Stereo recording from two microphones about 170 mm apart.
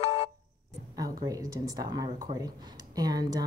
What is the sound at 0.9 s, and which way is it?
Speech, 20° right (ahead or behind).